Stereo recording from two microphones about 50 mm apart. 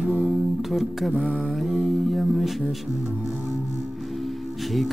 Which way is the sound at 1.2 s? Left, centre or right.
Right.